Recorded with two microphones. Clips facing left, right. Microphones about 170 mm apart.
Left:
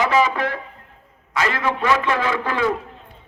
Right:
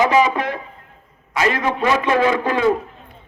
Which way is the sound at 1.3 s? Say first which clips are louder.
Right 3 dB; 20° right (ahead or behind).